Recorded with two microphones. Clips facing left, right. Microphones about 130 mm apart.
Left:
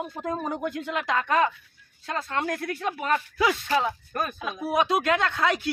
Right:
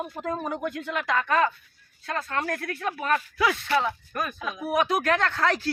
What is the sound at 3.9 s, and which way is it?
Speech, 30° left (ahead or behind).